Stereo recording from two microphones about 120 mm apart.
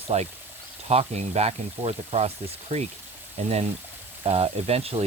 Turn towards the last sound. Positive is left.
turn(degrees=-55)  # may be behind; listen again after turning